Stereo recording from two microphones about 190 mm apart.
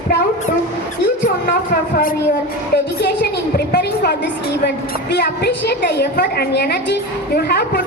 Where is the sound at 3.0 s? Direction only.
55° left (ahead or behind).